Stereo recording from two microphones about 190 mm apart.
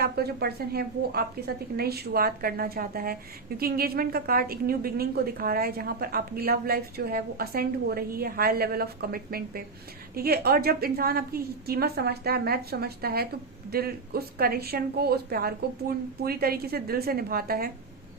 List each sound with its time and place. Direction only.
0.0 s a woman's voice: 55° right (ahead or behind)